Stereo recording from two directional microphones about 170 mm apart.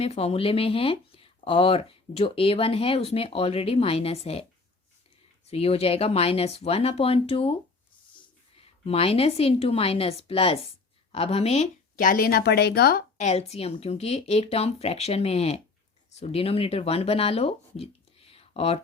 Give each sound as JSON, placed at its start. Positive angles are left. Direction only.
{"t": 0.0, "sound": "speech", "side_deg": 35}
{"t": 5.5, "sound": "speech", "side_deg": 35}
{"t": 8.5, "sound": "speech", "side_deg": 35}
{"t": 13.1, "sound": "speech", "side_deg": 40}
{"t": 18.3, "sound": "a sound", "side_deg": 35}